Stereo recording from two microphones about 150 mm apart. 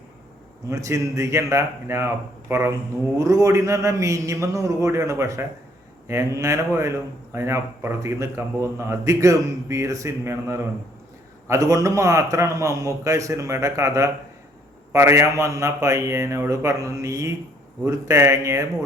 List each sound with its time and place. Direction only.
0.7 s speech: 20° right (ahead or behind)